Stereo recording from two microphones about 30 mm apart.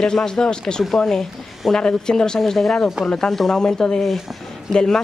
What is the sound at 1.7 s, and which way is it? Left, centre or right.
Speech, left.